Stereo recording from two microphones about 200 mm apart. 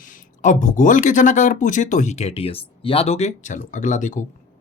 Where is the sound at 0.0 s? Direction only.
40° left (ahead or behind).